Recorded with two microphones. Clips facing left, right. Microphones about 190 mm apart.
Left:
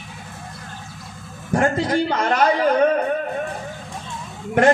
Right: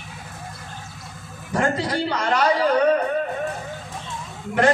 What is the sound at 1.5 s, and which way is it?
A man's voice, 45° left (ahead or behind).